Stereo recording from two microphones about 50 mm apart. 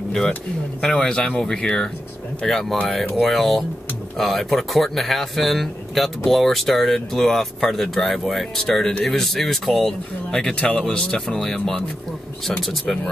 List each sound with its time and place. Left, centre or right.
0.7 s speech: centre
8.5 s speech: centre